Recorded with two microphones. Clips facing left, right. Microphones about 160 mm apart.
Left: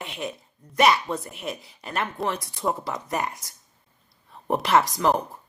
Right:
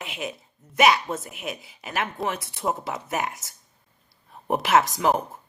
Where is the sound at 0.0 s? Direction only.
Centre (ahead or behind).